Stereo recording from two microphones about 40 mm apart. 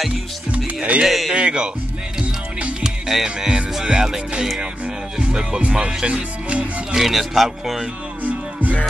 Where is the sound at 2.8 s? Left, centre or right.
Centre.